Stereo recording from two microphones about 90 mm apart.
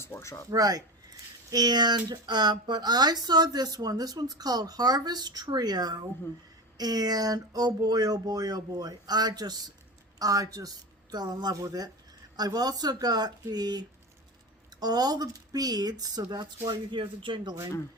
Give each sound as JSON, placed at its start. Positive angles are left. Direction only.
{"t": 0.0, "sound": "speech", "side_deg": 30}
{"t": 0.5, "sound": "speech", "side_deg": -45}
{"t": 16.6, "sound": "speech", "side_deg": -65}